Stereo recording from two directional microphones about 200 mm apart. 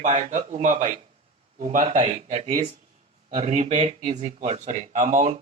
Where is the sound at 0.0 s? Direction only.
40° right (ahead or behind).